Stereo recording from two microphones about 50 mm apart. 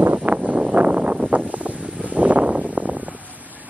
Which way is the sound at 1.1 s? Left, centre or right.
Right.